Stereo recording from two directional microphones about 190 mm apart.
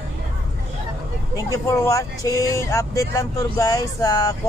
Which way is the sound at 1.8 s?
15° left (ahead or behind).